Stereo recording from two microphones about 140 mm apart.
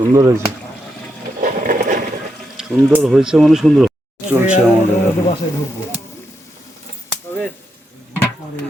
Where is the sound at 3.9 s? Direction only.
15° right (ahead or behind).